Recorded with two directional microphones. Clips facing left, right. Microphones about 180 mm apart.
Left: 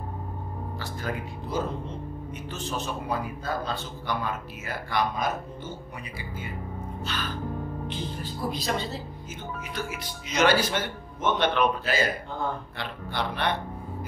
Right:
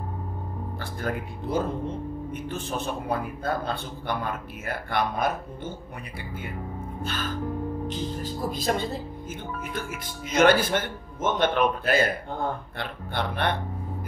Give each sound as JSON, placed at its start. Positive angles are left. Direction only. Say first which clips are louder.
{"t": 0.7, "sound": "a man's voice", "louder": "right 3 dB", "side_deg": -55}